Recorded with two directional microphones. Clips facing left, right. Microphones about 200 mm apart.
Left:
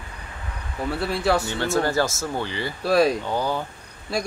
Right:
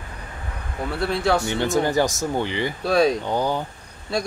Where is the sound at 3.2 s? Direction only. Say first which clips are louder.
Right 2 dB; 15° right (ahead or behind).